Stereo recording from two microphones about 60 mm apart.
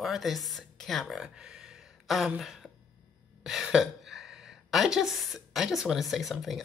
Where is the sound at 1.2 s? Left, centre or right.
Centre.